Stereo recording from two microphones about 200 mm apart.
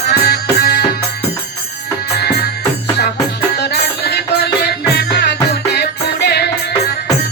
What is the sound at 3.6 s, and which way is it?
Music, 55° left (ahead or behind).